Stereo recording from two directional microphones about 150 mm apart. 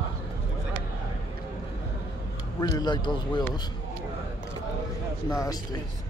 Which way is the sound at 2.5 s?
25° left (ahead or behind).